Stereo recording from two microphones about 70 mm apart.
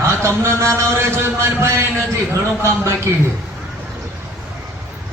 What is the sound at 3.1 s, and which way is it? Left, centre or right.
Speech, right.